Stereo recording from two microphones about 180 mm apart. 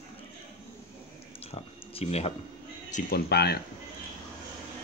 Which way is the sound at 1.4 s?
35° left (ahead or behind).